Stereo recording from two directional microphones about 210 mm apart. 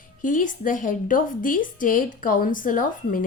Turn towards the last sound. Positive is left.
turn(degrees=40)  # may be behind; listen again after turning